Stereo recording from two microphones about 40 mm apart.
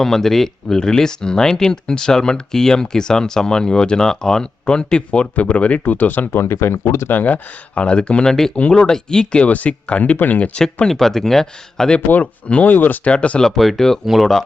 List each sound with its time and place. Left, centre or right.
0.0 s speech: centre; by 6.2 s left
6.3 s speech: left
7.1 s speech: left
7.8 s speech: left
9.4 s speech: left
10.2 s speech: left
10.8 s speech: centre
12.1 s speech: left
12.6 s speech: left
13.1 s speech: left
13.6 s speech: centre